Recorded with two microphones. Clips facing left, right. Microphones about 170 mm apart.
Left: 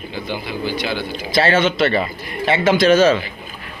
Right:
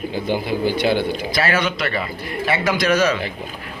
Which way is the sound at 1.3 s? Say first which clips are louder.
Left 7 dB; 25° left (ahead or behind).